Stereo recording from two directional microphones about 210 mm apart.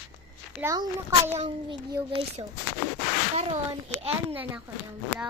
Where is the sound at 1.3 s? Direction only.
30° right (ahead or behind).